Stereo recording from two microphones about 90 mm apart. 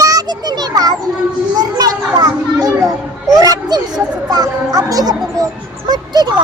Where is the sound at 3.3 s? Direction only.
45° right (ahead or behind).